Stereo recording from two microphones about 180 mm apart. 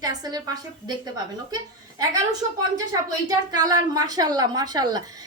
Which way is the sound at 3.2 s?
20° right (ahead or behind).